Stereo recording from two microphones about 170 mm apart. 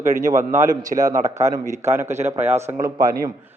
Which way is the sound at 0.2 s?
20° right (ahead or behind).